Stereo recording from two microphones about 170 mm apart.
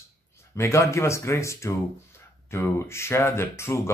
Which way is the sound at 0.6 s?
15° left (ahead or behind).